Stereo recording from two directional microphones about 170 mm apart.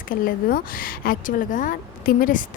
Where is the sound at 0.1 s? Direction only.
55° left (ahead or behind).